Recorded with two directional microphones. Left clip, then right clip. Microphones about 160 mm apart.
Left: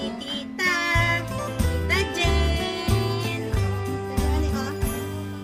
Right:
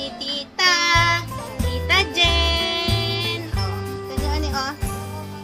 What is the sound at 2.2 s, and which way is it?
Music, 30° left (ahead or behind).